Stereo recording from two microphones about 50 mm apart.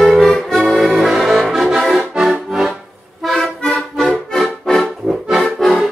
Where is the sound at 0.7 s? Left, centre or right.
Centre.